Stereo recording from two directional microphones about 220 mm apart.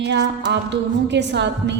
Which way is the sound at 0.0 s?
50° right (ahead or behind).